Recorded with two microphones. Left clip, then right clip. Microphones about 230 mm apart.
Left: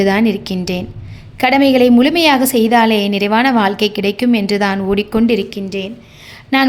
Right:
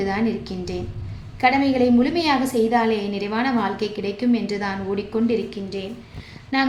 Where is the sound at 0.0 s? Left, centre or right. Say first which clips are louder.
Left 10 dB; left.